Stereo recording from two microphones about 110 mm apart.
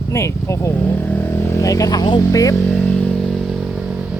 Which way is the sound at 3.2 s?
Centre (ahead or behind).